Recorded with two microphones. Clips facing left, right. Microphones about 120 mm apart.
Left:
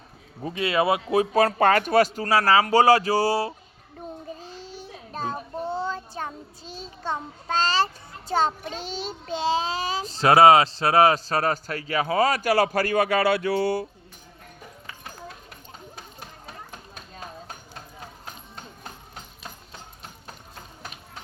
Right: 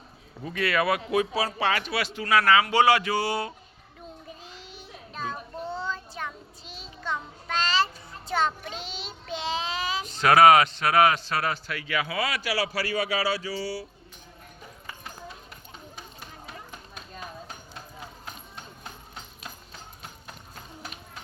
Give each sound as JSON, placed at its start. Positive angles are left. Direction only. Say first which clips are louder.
{"t": 0.4, "sound": "speech", "louder": "left 3 dB", "side_deg": 25}
{"t": 1.3, "sound": "child singing", "louder": "left 8 dB", "side_deg": 50}